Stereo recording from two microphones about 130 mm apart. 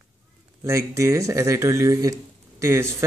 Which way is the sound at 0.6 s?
20° right (ahead or behind).